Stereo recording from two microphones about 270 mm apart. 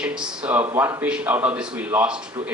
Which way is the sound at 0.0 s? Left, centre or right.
Centre.